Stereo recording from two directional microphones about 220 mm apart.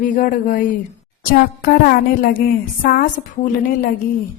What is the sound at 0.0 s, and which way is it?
A woman's voice, 35° left (ahead or behind).